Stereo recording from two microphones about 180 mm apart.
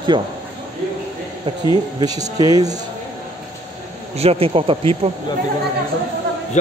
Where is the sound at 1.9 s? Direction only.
20° right (ahead or behind).